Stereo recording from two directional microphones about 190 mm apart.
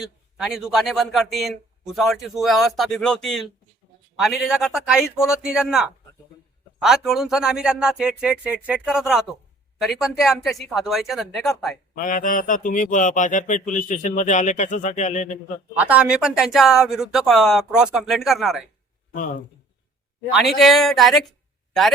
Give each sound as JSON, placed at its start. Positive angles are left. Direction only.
{"t": 0.0, "sound": "speech", "side_deg": 0}
{"t": 11.9, "sound": "speech", "side_deg": 45}
{"t": 15.7, "sound": "speech", "side_deg": -5}
{"t": 20.3, "sound": "a man's voice", "side_deg": 0}